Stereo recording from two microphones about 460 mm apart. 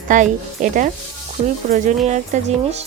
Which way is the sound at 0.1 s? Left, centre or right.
Centre.